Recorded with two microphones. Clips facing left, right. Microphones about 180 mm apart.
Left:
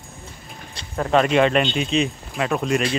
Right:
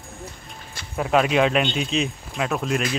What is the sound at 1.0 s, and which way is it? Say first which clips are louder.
Speech: left 2 dB; 5° right (ahead or behind).